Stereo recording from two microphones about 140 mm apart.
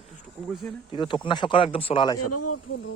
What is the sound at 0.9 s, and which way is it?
Speech, 35° left (ahead or behind).